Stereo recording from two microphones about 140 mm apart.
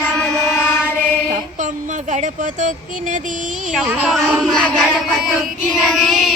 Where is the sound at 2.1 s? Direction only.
60° right (ahead or behind).